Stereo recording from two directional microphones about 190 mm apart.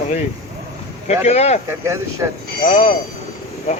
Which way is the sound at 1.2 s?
35° left (ahead or behind).